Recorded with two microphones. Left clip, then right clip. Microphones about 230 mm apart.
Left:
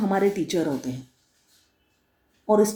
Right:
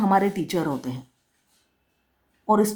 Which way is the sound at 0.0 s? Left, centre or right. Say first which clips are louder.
Right 2 dB; right.